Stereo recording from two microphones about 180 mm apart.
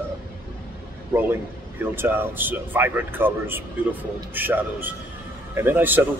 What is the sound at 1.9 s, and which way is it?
A man's voice, 10° right (ahead or behind).